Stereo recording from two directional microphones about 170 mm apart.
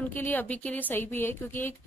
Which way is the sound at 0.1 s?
10° left (ahead or behind).